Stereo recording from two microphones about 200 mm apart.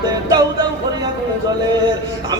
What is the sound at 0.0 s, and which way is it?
Music, 20° right (ahead or behind).